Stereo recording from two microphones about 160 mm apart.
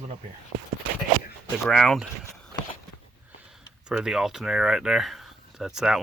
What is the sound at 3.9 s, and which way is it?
Speech, 5° right (ahead or behind).